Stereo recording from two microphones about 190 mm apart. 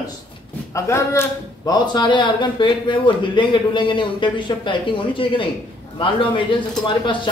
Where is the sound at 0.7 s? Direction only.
15° left (ahead or behind).